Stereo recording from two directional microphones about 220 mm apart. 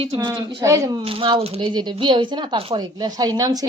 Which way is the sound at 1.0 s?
25° right (ahead or behind).